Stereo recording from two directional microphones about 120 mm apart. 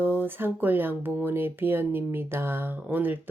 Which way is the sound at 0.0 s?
15° right (ahead or behind).